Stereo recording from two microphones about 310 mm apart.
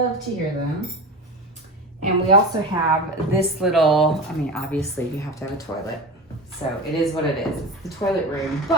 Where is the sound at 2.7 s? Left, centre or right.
Centre.